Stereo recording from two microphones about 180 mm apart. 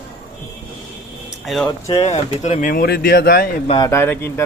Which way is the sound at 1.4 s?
Centre (ahead or behind).